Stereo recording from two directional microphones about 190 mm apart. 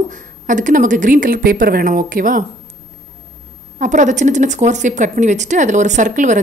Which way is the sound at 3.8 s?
40° right (ahead or behind).